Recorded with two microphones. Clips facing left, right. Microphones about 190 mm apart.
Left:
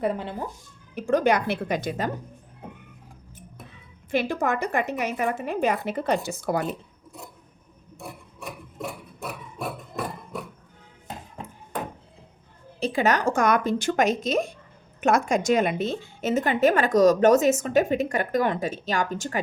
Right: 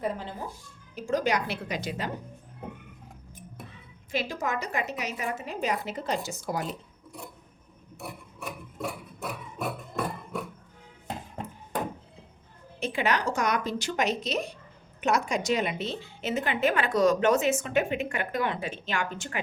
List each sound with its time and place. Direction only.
0.0 s a woman's voice: 65° left (ahead or behind); by 2.1 s 45° left (ahead or behind)
4.1 s a woman's voice: 55° left (ahead or behind)
12.8 s a woman's voice: 40° left (ahead or behind)